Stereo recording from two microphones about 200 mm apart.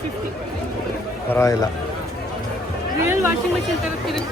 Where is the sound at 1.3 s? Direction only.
15° left (ahead or behind).